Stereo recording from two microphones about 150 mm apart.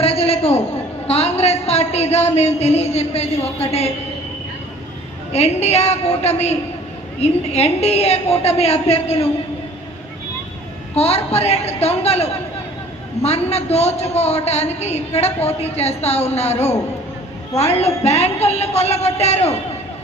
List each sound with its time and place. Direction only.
0.0 s a sound: 40° left (ahead or behind)
5.3 s a man's voice: 45° left (ahead or behind)
10.9 s a man's voice: 45° left (ahead or behind)